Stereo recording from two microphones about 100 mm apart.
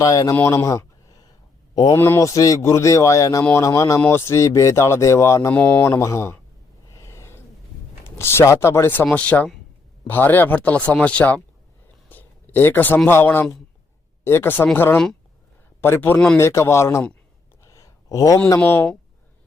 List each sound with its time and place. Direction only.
0.0 s a man's voice: 35° left (ahead or behind)
0.5 s a sound: 35° left (ahead or behind)
1.7 s a man's voice: 40° left (ahead or behind)
2.0 s a man's voice: 25° left (ahead or behind)
5.9 s speech: 30° left (ahead or behind)
6.9 s snort: 30° left (ahead or behind)
8.2 s speech: 25° left (ahead or behind)
12.0 s a sound: 20° left (ahead or behind)
13.1 s speech: 20° left (ahead or behind)
16.4 s speech: 30° left (ahead or behind)
17.6 s a sound: 30° left (ahead or behind)
18.4 s speech: 30° left (ahead or behind)